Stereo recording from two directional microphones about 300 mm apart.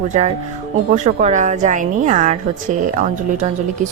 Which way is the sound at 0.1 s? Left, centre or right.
Right.